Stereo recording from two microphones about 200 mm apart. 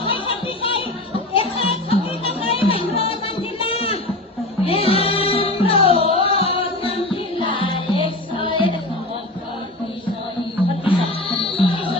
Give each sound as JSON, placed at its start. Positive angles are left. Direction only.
{"t": 0.0, "sound": "music", "side_deg": 25}
{"t": 10.8, "sound": "music", "side_deg": 25}